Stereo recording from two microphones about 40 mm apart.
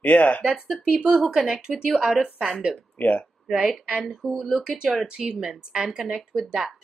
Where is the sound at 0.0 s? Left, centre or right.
Left.